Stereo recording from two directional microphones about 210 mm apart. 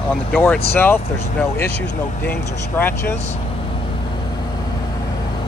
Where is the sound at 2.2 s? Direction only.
10° left (ahead or behind).